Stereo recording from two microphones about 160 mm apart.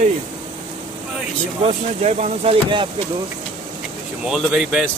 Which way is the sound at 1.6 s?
45° right (ahead or behind).